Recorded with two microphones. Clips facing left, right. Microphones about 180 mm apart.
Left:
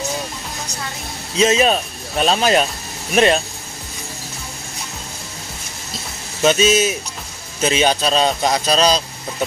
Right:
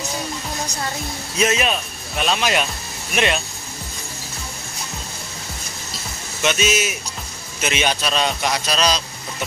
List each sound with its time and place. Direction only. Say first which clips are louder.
1.3 s speech: left 5 dB; 25° left (ahead or behind)
6.4 s speech: left 6 dB; 30° left (ahead or behind)